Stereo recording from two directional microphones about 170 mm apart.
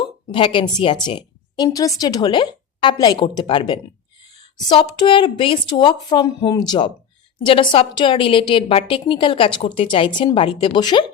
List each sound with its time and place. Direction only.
0.0 s a woman's voice: 30° left (ahead or behind)